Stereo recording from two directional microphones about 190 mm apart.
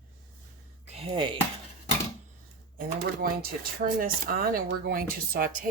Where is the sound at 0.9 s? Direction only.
30° right (ahead or behind).